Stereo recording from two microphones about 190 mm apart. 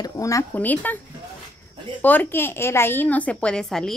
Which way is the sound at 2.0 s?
10° left (ahead or behind).